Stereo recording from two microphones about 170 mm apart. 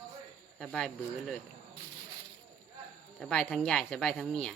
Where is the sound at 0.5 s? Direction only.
5° left (ahead or behind).